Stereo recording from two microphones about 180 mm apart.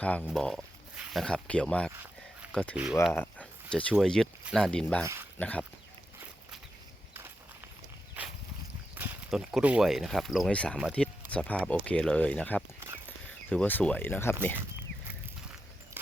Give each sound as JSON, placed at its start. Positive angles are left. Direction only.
{"t": 0.0, "sound": "speech", "side_deg": 5}
{"t": 9.0, "sound": "speech", "side_deg": -5}